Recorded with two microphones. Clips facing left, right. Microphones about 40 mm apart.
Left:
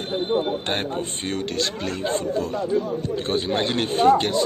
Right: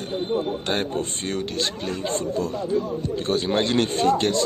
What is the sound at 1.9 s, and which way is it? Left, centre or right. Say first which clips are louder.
Speech: left 2 dB; left.